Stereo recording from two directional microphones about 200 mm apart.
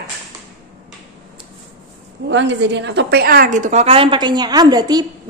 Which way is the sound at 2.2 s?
65° right (ahead or behind).